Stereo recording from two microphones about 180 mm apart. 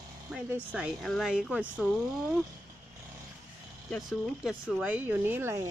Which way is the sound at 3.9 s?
Centre (ahead or behind).